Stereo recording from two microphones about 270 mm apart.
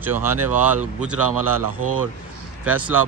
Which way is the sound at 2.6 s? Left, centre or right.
Centre.